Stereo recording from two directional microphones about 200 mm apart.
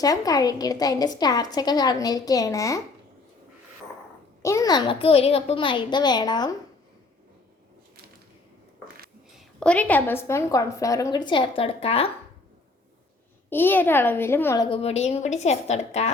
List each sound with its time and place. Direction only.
0.0 s a woman's voice: 20° left (ahead or behind)
4.4 s a woman's voice: 15° left (ahead or behind)
9.6 s a woman's voice: 5° left (ahead or behind); by 12.1 s 30° left (ahead or behind)
13.5 s a woman's voice: 10° left (ahead or behind); by 16.0 s 35° left (ahead or behind)